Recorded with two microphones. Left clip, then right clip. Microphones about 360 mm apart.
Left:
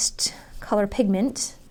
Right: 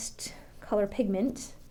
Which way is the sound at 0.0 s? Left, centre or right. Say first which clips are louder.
Left 15 dB; left.